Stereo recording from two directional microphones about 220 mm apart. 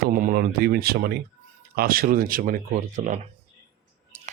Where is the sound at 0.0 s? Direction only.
45° right (ahead or behind).